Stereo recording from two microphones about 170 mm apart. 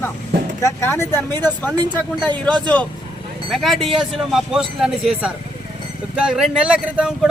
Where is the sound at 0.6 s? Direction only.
15° left (ahead or behind).